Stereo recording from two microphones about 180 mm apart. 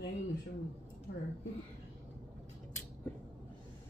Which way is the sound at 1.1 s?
50° left (ahead or behind).